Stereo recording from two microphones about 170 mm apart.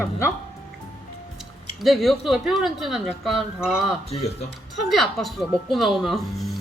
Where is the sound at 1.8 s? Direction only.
Centre (ahead or behind).